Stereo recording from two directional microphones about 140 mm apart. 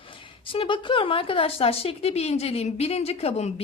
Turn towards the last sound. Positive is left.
turn(degrees=45)  # may be behind; listen again after turning